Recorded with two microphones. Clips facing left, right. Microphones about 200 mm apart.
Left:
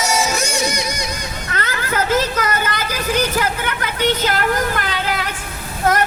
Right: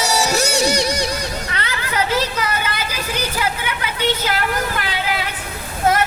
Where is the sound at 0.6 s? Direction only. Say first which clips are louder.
Right 4 dB; 35° right (ahead or behind).